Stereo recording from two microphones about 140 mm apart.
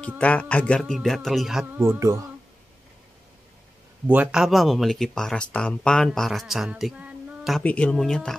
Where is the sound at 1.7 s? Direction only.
15° right (ahead or behind).